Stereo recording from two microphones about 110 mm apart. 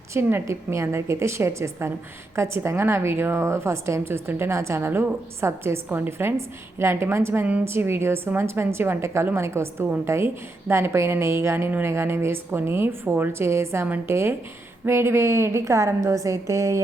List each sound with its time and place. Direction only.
0.1 s a woman's voice: 20° right (ahead or behind)